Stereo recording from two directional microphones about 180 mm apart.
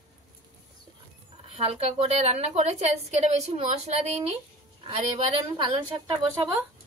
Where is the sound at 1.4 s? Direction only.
35° right (ahead or behind).